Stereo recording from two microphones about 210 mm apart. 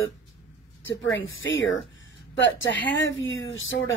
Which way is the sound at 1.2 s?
65° left (ahead or behind).